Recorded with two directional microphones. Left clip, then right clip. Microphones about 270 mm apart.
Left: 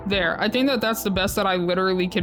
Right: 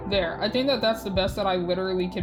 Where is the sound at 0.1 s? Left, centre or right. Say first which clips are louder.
Left 3 dB; left.